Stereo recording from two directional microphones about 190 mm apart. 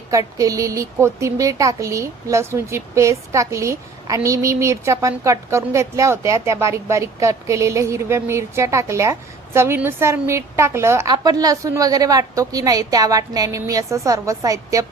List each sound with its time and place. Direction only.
0.1 s a woman's voice: 20° right (ahead or behind)